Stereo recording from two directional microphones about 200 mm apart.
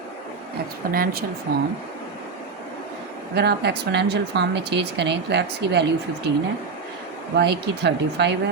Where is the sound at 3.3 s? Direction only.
55° right (ahead or behind).